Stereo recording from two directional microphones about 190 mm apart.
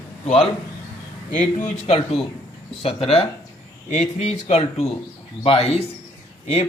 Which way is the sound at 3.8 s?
40° left (ahead or behind).